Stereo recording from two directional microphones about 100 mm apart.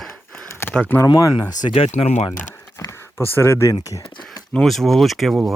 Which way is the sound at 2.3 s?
25° left (ahead or behind).